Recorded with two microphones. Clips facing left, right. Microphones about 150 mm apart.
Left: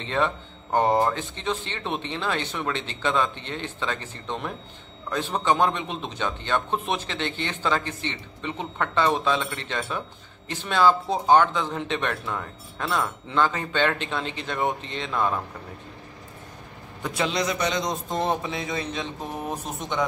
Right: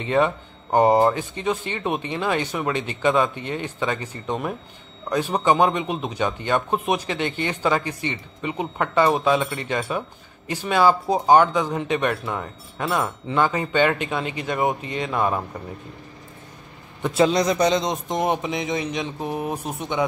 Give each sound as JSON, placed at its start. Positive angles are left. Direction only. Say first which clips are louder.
{"t": 0.0, "sound": "a man's voice", "louder": "right 5 dB", "side_deg": -10}
{"t": 17.0, "sound": "a man's voice", "louder": "right 8 dB", "side_deg": -30}
{"t": 17.3, "sound": "a man's voice", "louder": "right 6 dB", "side_deg": -40}
{"t": 18.0, "sound": "a man's voice", "louder": "right 3 dB", "side_deg": -15}